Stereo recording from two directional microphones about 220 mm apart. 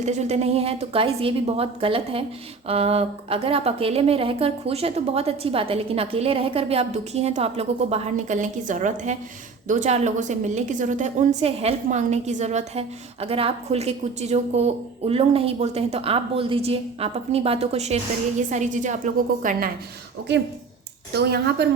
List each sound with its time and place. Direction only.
0.0 s a woman's voice: 30° right (ahead or behind)
21.1 s a woman's voice: 50° right (ahead or behind)